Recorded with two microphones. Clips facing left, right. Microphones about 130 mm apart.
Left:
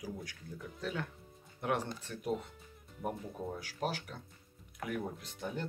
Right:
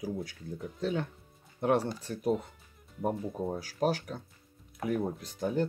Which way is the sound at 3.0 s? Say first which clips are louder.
Right 7 dB; 30° right (ahead or behind).